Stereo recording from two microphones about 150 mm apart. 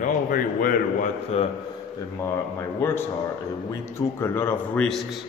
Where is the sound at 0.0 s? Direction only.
65° left (ahead or behind).